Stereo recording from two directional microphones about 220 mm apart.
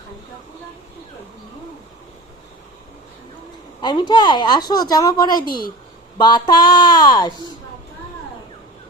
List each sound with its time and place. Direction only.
3.8 s speech: 20° left (ahead or behind)
5.4 s a woman's voice: 40° left (ahead or behind)
6.1 s speech: 20° left (ahead or behind)